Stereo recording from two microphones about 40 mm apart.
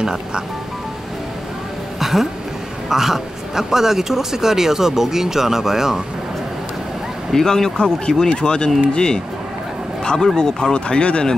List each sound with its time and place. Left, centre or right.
0.0 s speech: centre
2.0 s a sound: centre
2.9 s speech: centre
7.3 s speech: centre; by 11.3 s left